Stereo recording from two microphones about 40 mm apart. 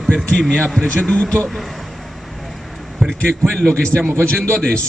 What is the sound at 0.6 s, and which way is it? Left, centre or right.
Speech, centre.